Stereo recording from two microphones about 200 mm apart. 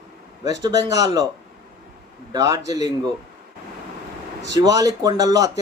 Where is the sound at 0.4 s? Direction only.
20° right (ahead or behind).